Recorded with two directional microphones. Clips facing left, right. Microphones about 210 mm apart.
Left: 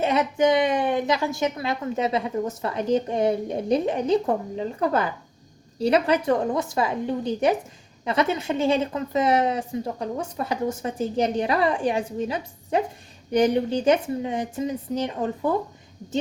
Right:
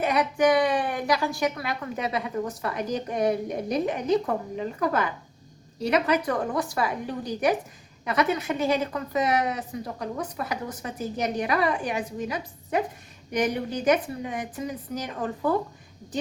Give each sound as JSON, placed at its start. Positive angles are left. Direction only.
{"t": 0.0, "sound": "a woman's voice", "side_deg": 25}